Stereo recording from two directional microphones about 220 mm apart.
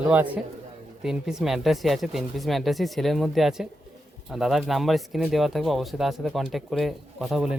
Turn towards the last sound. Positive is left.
turn(degrees=0)  # may be behind; listen again after turning